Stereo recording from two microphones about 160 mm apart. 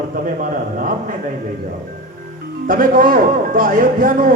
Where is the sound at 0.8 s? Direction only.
55° right (ahead or behind).